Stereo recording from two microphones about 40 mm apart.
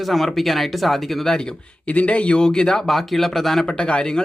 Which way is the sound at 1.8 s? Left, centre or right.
Left.